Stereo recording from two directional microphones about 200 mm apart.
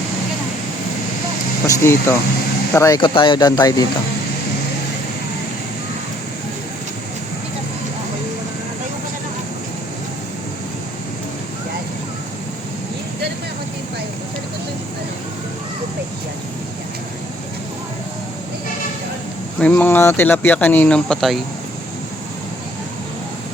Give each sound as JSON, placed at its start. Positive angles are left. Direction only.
{"t": 1.6, "sound": "speech", "side_deg": 15}
{"t": 19.5, "sound": "speech", "side_deg": 5}